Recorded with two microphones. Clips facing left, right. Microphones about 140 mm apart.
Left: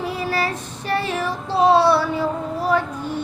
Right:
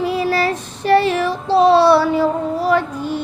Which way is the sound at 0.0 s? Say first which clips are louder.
Right 6 dB; 90° right.